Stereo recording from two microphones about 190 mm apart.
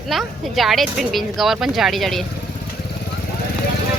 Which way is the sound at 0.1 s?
Centre (ahead or behind).